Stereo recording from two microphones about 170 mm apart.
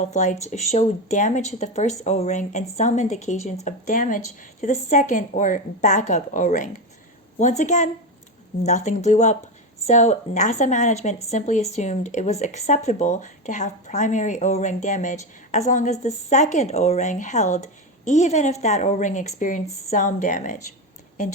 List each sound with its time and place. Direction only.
0.0 s a woman's voice: 45° left (ahead or behind)